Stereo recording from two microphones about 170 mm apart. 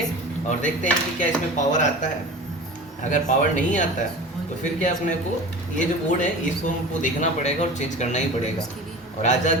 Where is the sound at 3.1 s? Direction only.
50° left (ahead or behind).